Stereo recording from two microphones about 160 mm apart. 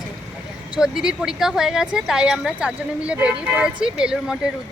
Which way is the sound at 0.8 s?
5° right (ahead or behind).